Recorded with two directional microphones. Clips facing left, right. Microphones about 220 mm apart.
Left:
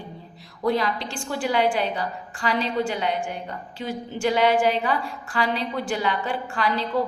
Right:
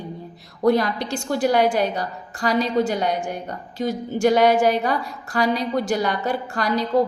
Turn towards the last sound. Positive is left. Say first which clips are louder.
# right 3 dB
turn(degrees=-40)  # may be behind; listen again after turning